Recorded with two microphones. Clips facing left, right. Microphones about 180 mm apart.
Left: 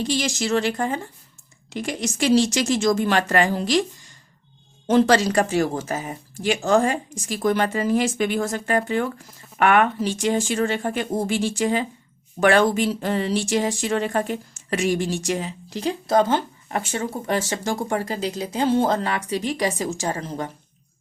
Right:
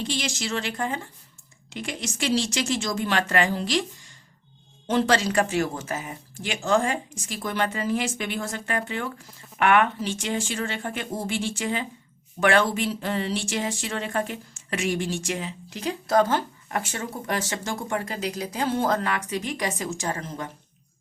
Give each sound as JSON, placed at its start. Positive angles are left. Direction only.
{"t": 0.0, "sound": "a woman's voice", "side_deg": 40}
{"t": 4.9, "sound": "speech", "side_deg": 40}